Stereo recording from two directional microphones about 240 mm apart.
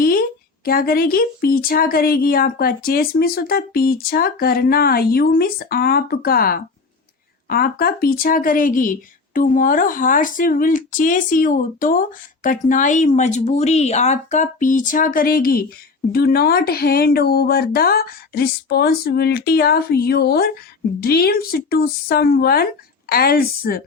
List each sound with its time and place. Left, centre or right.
0.0 s speech: left